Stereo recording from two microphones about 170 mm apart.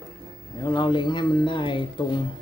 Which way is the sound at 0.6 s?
25° left (ahead or behind).